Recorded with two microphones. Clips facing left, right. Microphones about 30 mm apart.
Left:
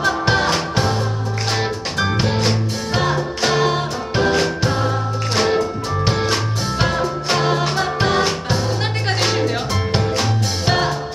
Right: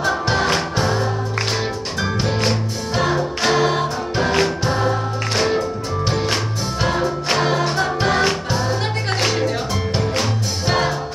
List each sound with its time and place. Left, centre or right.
2.0 s music: centre
3.4 s music: centre
5.3 s music: centre
7.3 s music: centre
9.2 s music: centre